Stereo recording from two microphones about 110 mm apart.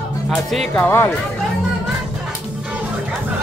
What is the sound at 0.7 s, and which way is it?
Speech, 20° left (ahead or behind).